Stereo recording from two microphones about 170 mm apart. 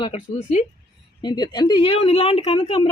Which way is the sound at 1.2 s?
25° left (ahead or behind).